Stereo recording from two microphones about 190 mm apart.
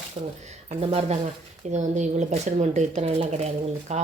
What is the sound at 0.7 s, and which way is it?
A woman's voice, 30° right (ahead or behind).